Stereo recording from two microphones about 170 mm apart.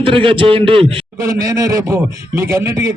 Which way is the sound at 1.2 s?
15° right (ahead or behind).